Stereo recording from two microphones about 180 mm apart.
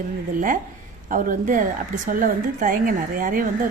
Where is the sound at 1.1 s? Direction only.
50° right (ahead or behind).